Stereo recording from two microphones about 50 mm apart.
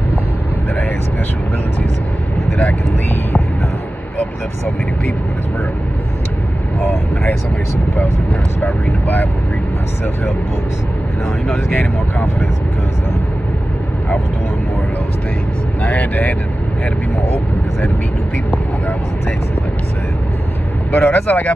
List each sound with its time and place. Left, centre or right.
8.6 s speech: left
15.8 s speech: left
20.9 s speech: left